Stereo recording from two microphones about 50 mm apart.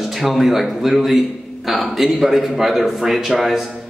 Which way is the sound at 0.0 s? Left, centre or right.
Centre.